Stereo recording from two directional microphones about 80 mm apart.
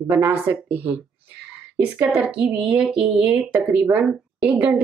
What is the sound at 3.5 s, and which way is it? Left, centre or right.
Speech, right.